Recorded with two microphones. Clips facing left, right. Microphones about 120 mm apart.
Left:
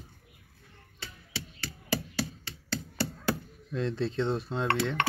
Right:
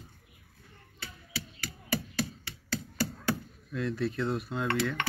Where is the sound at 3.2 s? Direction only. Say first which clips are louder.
Left 1 dB; 30° left (ahead or behind).